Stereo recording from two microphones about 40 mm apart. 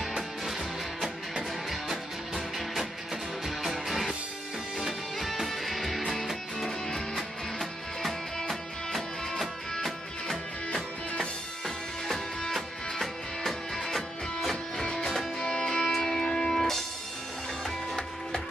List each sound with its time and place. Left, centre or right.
1.3 s music: centre
3.4 s music: centre
11.1 s music: centre
15.3 s music: centre